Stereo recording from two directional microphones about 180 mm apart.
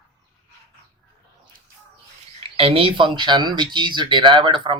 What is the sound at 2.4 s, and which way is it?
Speech, 30° right (ahead or behind).